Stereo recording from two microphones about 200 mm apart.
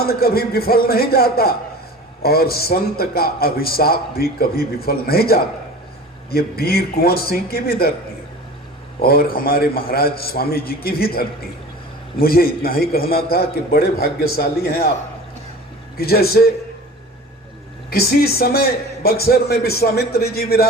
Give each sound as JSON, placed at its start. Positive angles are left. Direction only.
{"t": 0.0, "sound": "a man's voice", "side_deg": 50}
{"t": 9.0, "sound": "a man's voice", "side_deg": 50}
{"t": 16.0, "sound": "a man's voice", "side_deg": 50}
{"t": 17.9, "sound": "a man's voice", "side_deg": 50}